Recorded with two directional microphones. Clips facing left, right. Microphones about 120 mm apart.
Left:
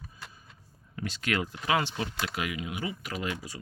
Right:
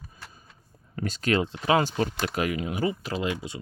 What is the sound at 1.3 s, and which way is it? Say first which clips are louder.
Speech: right 6 dB; 25° right (ahead or behind).